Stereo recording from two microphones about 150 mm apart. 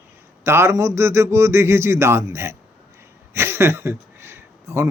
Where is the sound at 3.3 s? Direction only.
15° right (ahead or behind).